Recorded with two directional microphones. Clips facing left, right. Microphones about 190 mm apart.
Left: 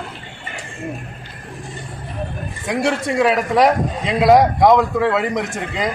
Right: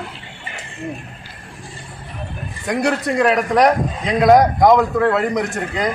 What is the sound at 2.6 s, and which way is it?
A man's voice, centre (ahead or behind).